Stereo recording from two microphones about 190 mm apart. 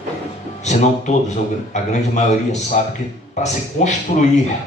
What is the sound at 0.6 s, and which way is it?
A man's voice, 40° left (ahead or behind).